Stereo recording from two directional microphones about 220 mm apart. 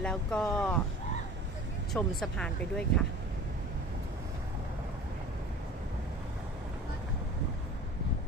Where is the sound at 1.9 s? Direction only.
Centre (ahead or behind).